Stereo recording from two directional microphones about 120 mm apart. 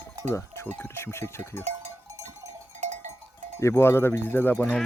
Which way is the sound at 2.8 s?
80° right.